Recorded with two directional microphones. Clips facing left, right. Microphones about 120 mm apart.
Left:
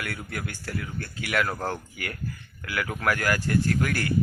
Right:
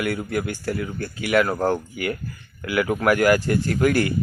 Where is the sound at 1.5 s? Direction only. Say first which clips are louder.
Right 9 dB; 20° right (ahead or behind).